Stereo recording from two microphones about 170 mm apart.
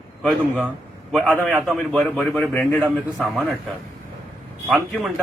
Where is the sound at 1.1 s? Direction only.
5° right (ahead or behind).